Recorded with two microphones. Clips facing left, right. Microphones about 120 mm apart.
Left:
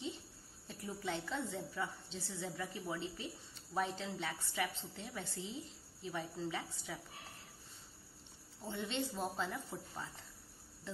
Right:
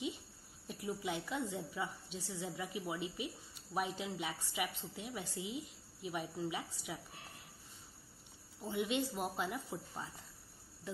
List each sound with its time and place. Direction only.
0.7 s a woman's voice: 10° right (ahead or behind)
8.6 s a woman's voice: 10° right (ahead or behind)